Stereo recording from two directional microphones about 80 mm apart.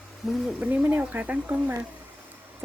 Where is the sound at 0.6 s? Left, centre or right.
Right.